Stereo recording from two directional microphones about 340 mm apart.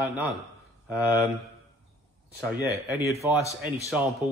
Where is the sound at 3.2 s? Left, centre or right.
Centre.